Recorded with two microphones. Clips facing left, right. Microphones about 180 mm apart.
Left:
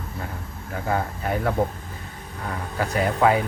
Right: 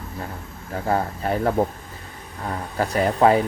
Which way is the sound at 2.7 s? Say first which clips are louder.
Right 3 dB; 40° right (ahead or behind).